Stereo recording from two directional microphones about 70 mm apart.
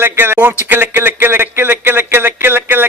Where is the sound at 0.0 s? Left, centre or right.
Right.